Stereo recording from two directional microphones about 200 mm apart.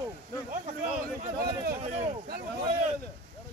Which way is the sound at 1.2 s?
40° right (ahead or behind).